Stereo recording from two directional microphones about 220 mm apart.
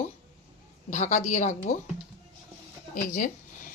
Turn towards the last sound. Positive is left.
turn(degrees=35)  # may be behind; listen again after turning